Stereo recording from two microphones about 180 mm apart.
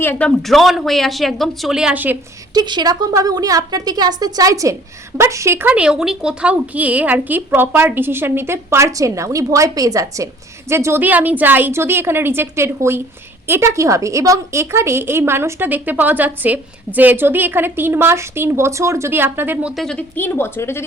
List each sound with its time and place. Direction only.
0.0 s speech: 10° left (ahead or behind); by 2.1 s 10° right (ahead or behind)
2.5 s a woman's voice: 25° right (ahead or behind)
19.7 s speech: 5° left (ahead or behind)